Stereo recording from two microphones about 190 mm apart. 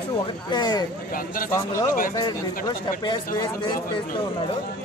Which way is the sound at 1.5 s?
15° left (ahead or behind).